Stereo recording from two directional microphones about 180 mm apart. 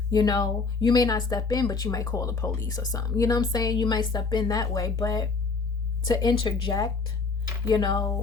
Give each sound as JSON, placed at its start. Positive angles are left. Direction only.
{"t": 0.1, "sound": "speech", "side_deg": 20}